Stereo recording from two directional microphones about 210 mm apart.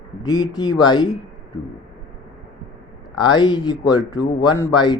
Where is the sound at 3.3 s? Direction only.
20° left (ahead or behind).